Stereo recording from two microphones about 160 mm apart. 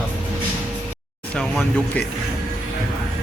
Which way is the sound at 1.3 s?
5° left (ahead or behind).